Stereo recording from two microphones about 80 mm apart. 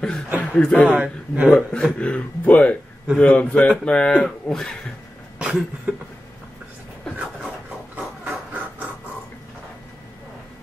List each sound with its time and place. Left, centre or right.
0.4 s speech: centre
0.9 s a man's voice: centre
1.5 s speech: centre
5.4 s a man's voice: centre
8.3 s rub: centre